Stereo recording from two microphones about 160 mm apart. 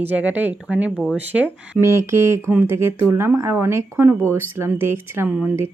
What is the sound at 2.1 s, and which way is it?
Speech, 15° right (ahead or behind).